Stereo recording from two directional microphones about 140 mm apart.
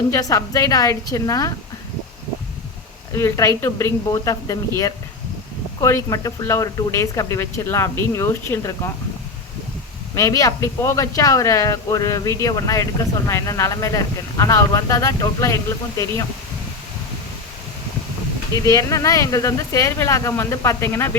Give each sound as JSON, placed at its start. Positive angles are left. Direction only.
{"t": 0.1, "sound": "speech", "side_deg": 25}
{"t": 3.1, "sound": "speech", "side_deg": 20}
{"t": 5.8, "sound": "speech", "side_deg": 20}
{"t": 10.2, "sound": "speech", "side_deg": 25}
{"t": 18.5, "sound": "speech", "side_deg": 25}